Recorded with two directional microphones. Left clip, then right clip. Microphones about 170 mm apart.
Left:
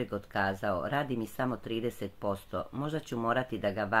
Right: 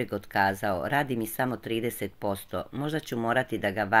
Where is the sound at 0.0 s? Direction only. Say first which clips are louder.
Right 6 dB; 15° right (ahead or behind).